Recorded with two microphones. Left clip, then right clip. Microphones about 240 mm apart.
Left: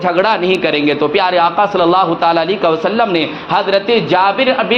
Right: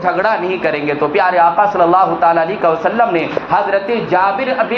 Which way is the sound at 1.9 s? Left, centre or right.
Left.